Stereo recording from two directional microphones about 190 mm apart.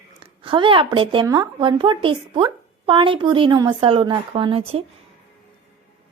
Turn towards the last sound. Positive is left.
turn(degrees=-30)  # may be behind; listen again after turning